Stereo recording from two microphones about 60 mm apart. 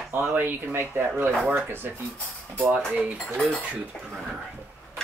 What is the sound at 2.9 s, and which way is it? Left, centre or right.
Speech, right.